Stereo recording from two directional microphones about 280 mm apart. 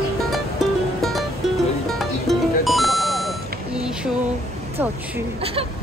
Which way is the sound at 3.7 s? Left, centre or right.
Centre.